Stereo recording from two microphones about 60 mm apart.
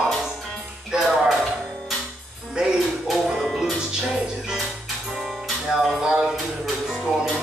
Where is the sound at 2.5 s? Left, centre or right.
Centre.